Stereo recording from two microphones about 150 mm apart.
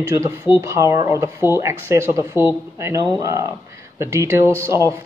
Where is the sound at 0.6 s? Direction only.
20° right (ahead or behind).